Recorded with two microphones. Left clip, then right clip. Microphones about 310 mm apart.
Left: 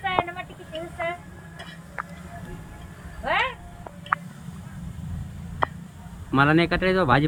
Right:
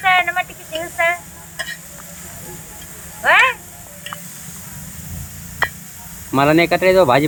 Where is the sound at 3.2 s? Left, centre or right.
Centre.